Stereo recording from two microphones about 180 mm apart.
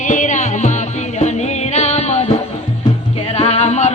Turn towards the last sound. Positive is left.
turn(degrees=40)  # may be behind; listen again after turning